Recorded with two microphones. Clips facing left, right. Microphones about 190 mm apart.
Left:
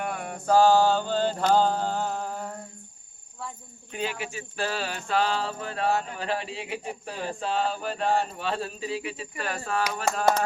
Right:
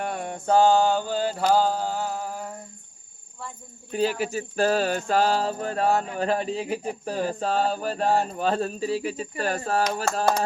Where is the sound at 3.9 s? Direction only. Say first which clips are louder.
Right 8 dB; 35° right (ahead or behind).